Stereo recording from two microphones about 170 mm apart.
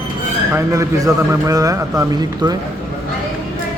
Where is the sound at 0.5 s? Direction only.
20° right (ahead or behind).